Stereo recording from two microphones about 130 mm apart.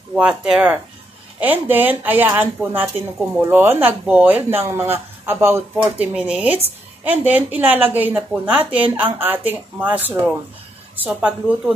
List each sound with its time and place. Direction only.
0.1 s speech: 5° right (ahead or behind)